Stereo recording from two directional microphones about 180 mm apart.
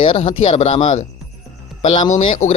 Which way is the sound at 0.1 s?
35° left (ahead or behind).